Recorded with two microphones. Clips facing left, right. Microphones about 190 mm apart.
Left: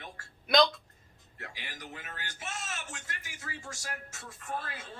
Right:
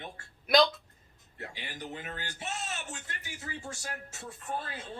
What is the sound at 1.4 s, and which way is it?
Speech, 35° right (ahead or behind).